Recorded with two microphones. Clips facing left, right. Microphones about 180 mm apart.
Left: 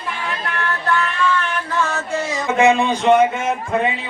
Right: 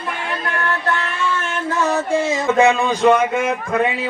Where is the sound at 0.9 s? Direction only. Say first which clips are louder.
Left 3 dB; 25° right (ahead or behind).